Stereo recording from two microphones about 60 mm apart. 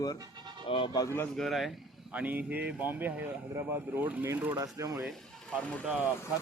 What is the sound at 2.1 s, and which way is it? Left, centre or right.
Speech, right.